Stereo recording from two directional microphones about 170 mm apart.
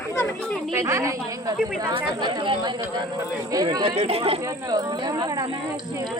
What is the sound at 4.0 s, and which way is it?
Speech, 35° right (ahead or behind).